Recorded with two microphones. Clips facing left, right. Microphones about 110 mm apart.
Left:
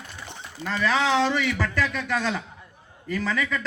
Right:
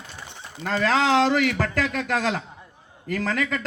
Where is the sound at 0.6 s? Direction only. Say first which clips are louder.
Right 2 dB; 40° right (ahead or behind).